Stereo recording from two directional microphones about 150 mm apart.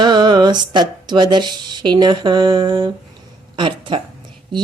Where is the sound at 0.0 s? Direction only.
30° right (ahead or behind).